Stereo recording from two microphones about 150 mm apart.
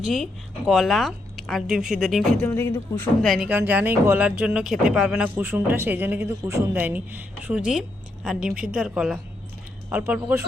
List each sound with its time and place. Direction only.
0.0 s a woman's voice: centre (ahead or behind)
2.6 s speech: 15° left (ahead or behind)
3.2 s a woman's voice: centre (ahead or behind)
3.5 s speech: 10° right (ahead or behind)